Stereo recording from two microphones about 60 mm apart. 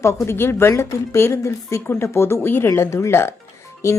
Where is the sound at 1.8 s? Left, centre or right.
Left.